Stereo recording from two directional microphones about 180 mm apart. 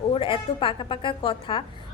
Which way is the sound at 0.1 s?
30° left (ahead or behind).